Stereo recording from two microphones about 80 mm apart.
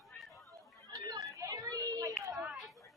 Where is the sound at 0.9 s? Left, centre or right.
Right.